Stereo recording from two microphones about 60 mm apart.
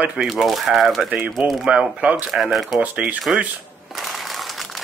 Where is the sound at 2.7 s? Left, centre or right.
Centre.